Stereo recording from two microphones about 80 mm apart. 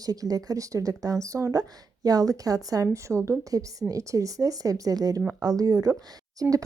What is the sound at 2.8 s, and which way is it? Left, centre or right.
A woman's voice, right.